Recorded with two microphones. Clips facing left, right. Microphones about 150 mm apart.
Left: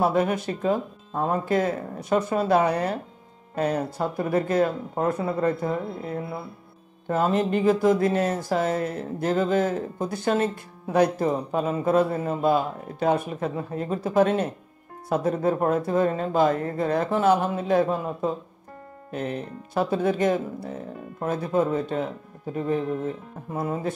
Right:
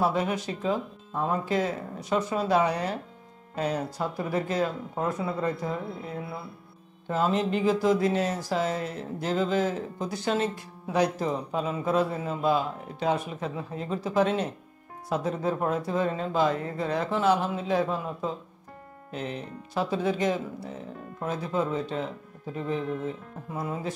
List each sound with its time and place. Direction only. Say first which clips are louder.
0.0 s speech: left 4 dB; 50° left (ahead or behind)
7.1 s speech: left 3 dB; 50° left (ahead or behind)